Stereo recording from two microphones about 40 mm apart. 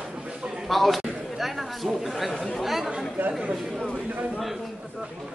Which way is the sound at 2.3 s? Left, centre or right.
Centre.